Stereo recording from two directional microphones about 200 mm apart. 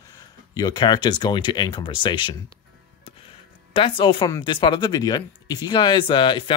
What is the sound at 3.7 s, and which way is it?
Speech, 25° left (ahead or behind).